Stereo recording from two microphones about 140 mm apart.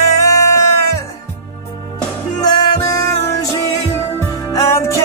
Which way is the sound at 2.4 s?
30° left (ahead or behind).